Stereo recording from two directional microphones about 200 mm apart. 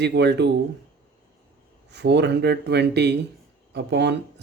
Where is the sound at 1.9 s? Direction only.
60° right (ahead or behind).